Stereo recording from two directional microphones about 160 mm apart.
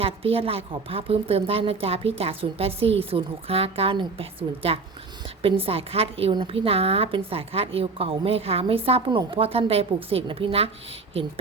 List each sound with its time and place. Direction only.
0.0 s a woman's voice: 35° right (ahead or behind)